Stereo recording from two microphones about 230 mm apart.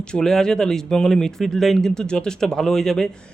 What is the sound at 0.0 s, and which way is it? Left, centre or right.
Speech, centre.